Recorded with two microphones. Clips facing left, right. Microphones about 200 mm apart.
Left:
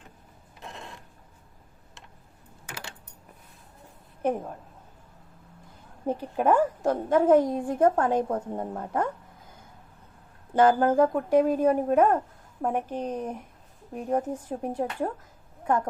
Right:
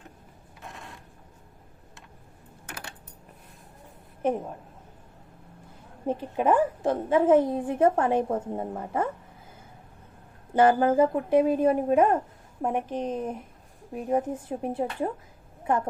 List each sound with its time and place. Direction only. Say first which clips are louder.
6.3 s a woman's voice: even; 5° right (ahead or behind)
10.5 s a woman's voice: even; 5° right (ahead or behind)